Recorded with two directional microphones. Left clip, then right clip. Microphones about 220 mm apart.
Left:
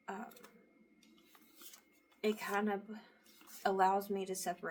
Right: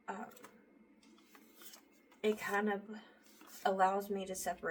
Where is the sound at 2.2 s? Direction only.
25° left (ahead or behind).